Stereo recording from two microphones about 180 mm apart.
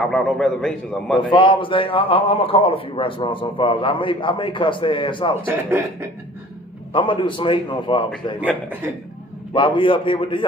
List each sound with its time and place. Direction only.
0.1 s a man's voice: 5° left (ahead or behind)
1.1 s a man's voice: 25° left (ahead or behind)
5.5 s speech: 10° right (ahead or behind)
6.9 s a man's voice: 25° left (ahead or behind)
9.5 s a man's voice: 25° left (ahead or behind)